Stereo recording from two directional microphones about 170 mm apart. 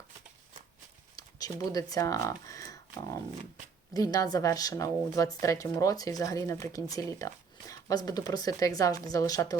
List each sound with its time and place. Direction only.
1.1 s speech: 20° left (ahead or behind)